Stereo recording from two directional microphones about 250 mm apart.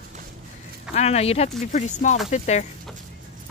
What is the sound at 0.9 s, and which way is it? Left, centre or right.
Speech, left.